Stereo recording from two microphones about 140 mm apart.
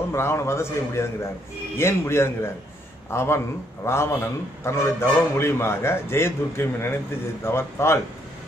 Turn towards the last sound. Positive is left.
turn(degrees=20)  # may be behind; listen again after turning